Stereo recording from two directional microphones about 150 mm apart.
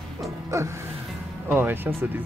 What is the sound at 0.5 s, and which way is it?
Music, 20° right (ahead or behind).